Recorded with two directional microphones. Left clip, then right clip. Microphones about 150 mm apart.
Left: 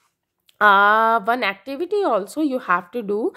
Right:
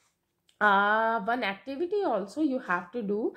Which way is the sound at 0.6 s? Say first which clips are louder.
Left 9 dB; 45° left (ahead or behind).